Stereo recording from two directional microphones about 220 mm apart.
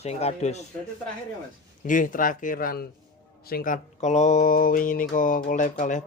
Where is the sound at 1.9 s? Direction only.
35° left (ahead or behind).